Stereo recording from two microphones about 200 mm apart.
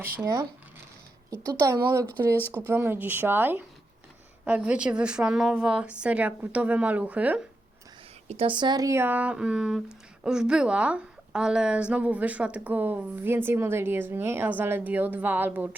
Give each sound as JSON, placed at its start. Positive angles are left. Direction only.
{"t": 0.2, "sound": "a woman's voice", "side_deg": -15}
{"t": 2.0, "sound": "speech", "side_deg": 10}
{"t": 2.5, "sound": "a woman's voice", "side_deg": -10}
{"t": 8.3, "sound": "a woman's voice", "side_deg": -25}